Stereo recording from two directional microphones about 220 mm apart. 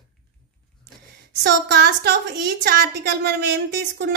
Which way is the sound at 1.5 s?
50° right (ahead or behind).